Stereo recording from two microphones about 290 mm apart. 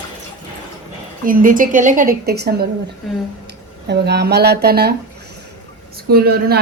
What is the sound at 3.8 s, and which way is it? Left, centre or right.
Speech, right.